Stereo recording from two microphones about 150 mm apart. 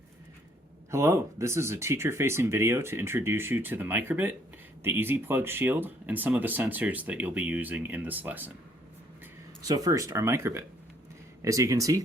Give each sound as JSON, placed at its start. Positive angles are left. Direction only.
{"t": 0.9, "sound": "speech", "side_deg": -20}
{"t": 9.6, "sound": "speech", "side_deg": -25}